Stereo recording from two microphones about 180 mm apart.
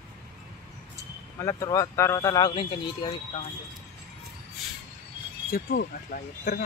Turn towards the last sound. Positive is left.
turn(degrees=55)  # may be behind; listen again after turning